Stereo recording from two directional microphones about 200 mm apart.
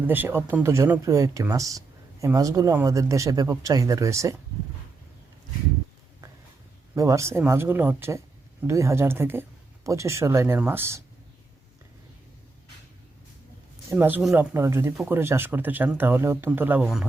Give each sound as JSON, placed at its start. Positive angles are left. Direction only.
{"t": 0.1, "sound": "speech", "side_deg": -10}
{"t": 6.9, "sound": "speech", "side_deg": -15}
{"t": 13.9, "sound": "speech", "side_deg": -10}